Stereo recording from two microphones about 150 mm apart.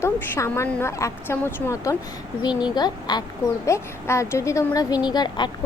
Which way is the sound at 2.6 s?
30° left (ahead or behind).